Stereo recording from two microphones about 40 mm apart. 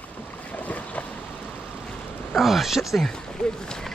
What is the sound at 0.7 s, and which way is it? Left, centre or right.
Vehicle, left.